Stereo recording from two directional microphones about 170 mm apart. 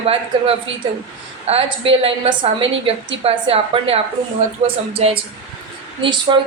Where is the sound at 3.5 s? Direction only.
35° right (ahead or behind).